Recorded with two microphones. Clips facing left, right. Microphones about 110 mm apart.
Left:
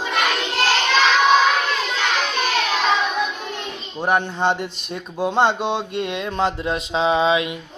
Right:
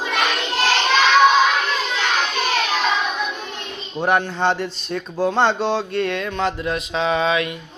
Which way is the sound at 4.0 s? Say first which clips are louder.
Right 1 dB; 15° left (ahead or behind).